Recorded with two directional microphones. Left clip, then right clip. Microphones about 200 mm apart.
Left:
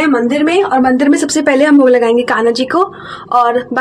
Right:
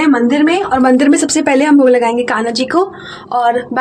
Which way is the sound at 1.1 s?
Centre (ahead or behind).